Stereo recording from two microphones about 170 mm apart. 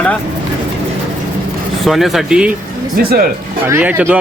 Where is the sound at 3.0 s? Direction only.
65° right (ahead or behind).